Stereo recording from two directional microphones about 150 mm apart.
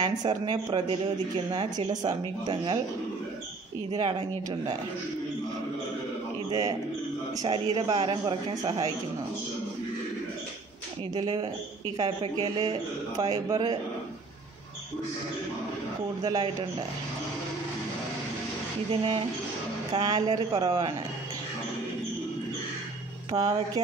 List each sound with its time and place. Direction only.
0.0 s speech: 30° right (ahead or behind)
3.9 s speech: 30° right (ahead or behind)
6.5 s a man's voice: 25° right (ahead or behind)
11.1 s a man's voice: 30° right (ahead or behind)
16.2 s speech: 25° right (ahead or behind)
18.9 s a man's voice: 35° right (ahead or behind)
23.3 s speech: 25° right (ahead or behind)